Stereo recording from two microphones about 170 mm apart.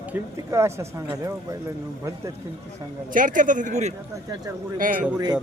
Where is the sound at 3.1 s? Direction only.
50° right (ahead or behind).